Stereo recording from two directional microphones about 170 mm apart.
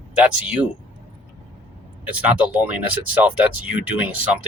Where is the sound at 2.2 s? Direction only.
10° right (ahead or behind).